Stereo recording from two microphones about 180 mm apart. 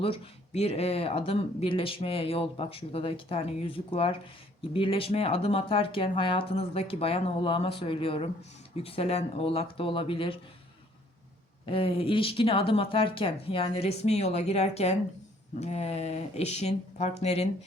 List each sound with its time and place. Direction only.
0.0 s speech: 35° left (ahead or behind)
11.6 s speech: 30° left (ahead or behind)